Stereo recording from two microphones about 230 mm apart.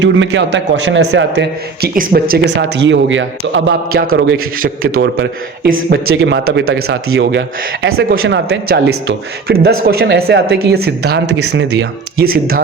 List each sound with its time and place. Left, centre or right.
0.0 s a man's voice: right
4.0 s speech: right
4.6 s a man's voice: right
5.7 s a man's voice: right